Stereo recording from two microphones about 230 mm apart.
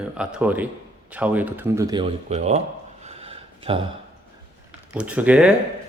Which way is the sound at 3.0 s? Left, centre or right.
Right.